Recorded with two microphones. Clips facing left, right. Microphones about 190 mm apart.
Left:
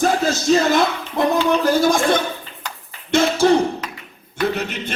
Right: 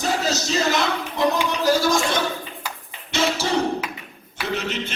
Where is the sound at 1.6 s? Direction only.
55° left (ahead or behind).